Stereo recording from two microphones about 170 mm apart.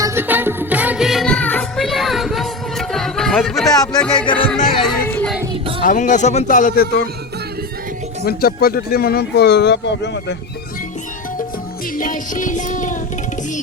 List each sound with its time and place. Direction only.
0.0 s music: 15° right (ahead or behind); by 4.3 s 5° left (ahead or behind)
4.3 s music: 30° left (ahead or behind)
5.0 s music: 10° left (ahead or behind)
5.8 s music: 50° left (ahead or behind)
8.2 s speech: 65° left (ahead or behind); by 10.3 s 90° left
11.9 s music: 50° left (ahead or behind)